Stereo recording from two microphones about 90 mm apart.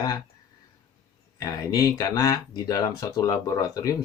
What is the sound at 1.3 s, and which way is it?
Speech, 40° left (ahead or behind).